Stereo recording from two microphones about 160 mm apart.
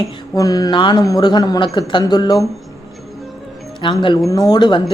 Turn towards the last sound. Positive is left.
turn(degrees=25)  # may be behind; listen again after turning